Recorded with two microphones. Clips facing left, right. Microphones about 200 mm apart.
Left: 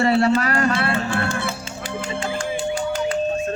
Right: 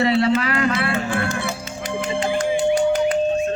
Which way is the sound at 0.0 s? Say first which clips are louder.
Even; 45° left (ahead or behind).